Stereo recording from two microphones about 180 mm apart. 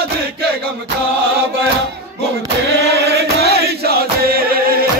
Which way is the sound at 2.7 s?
65° right (ahead or behind).